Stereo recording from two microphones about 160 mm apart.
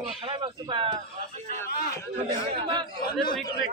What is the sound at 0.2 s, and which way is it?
Speech, 30° right (ahead or behind).